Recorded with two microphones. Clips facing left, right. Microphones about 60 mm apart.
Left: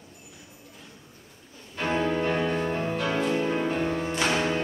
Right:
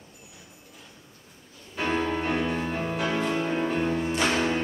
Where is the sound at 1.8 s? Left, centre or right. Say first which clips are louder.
Left 1 dB; centre.